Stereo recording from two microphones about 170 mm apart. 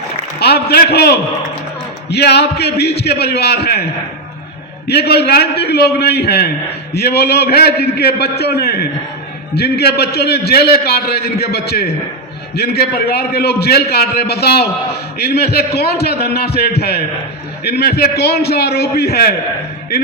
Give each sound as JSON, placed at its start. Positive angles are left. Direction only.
{"t": 0.3, "sound": "a man's voice", "side_deg": 70}
{"t": 4.9, "sound": "a man's voice", "side_deg": 70}